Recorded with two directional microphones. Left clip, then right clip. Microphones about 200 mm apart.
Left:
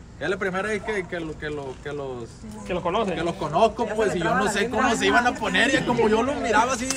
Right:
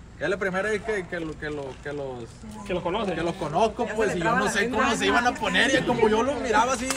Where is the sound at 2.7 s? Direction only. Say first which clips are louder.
Left 3 dB; 5° left (ahead or behind).